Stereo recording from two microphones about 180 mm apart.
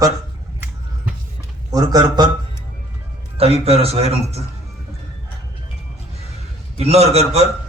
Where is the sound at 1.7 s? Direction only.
20° right (ahead or behind).